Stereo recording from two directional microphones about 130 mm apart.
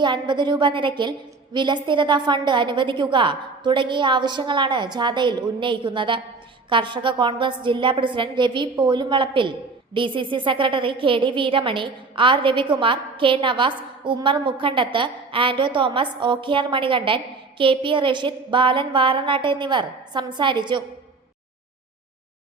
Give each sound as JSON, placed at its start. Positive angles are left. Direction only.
{"t": 0.0, "sound": "a woman's voice", "side_deg": -35}